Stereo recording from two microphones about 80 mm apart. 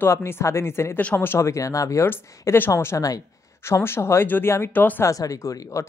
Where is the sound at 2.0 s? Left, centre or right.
Left.